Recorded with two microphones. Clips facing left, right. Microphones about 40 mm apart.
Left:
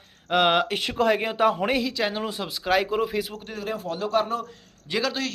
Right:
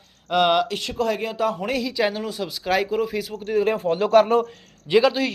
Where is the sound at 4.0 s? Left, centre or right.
Right.